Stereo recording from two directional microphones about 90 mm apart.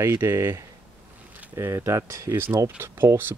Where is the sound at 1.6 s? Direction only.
35° right (ahead or behind).